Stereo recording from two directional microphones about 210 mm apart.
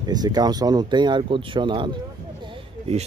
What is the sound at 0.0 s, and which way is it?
Speech, 20° right (ahead or behind).